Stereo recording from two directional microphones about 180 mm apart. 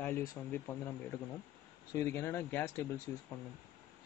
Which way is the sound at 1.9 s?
15° left (ahead or behind).